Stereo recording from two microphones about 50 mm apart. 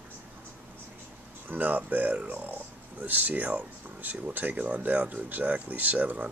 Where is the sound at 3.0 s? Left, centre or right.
Right.